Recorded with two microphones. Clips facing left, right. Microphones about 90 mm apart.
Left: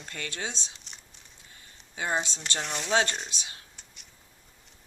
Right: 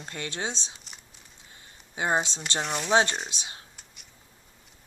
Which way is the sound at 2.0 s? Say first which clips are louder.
Right 4 dB; 35° right (ahead or behind).